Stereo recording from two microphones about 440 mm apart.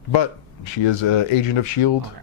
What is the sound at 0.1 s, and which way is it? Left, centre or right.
Speech, left.